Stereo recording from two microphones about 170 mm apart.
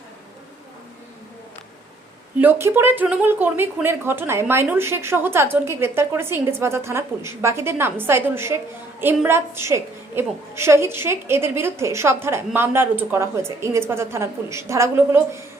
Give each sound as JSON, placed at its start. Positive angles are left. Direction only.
{"t": 2.4, "sound": "speech", "side_deg": -15}